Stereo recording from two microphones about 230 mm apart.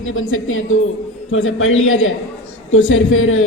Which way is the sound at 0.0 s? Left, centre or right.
Left.